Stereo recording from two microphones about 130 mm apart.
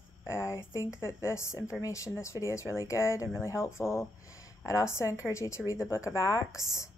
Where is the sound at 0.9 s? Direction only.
20° left (ahead or behind).